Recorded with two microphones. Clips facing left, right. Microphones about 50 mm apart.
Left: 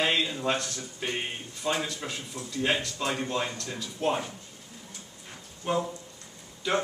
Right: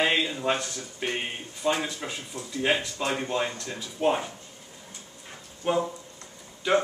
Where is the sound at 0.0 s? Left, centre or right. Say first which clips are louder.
Right 2 dB; centre.